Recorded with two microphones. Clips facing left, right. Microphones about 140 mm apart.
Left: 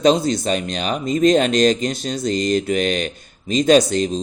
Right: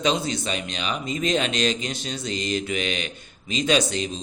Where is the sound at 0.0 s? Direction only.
45° left (ahead or behind).